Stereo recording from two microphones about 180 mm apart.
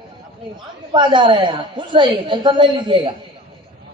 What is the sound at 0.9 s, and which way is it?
A man's voice, 25° right (ahead or behind).